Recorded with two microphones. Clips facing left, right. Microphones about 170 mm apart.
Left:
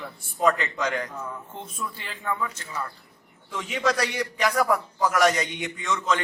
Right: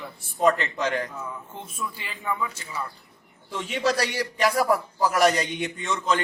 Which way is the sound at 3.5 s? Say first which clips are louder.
Right 1 dB; 35° right (ahead or behind).